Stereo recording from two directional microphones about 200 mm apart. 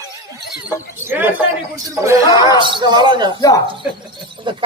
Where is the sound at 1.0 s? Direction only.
10° right (ahead or behind).